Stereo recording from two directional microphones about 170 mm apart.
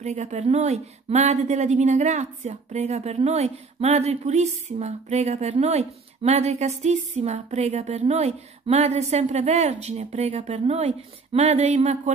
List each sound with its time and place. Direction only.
0.0 s speech: 40° right (ahead or behind)